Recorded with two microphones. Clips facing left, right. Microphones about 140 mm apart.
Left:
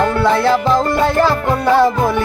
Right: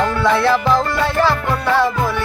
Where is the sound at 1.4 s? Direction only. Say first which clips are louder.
Left 4 dB; 20° left (ahead or behind).